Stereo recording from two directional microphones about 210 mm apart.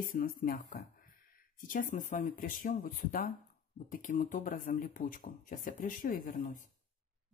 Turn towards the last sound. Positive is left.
turn(degrees=40)  # may be behind; listen again after turning